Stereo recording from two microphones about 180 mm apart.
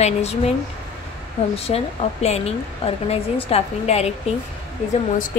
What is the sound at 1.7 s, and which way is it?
A woman's voice, 40° left (ahead or behind).